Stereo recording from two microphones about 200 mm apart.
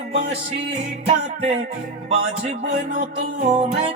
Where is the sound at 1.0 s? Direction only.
35° right (ahead or behind).